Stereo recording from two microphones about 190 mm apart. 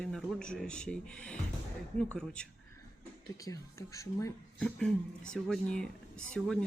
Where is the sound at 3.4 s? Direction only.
15° left (ahead or behind).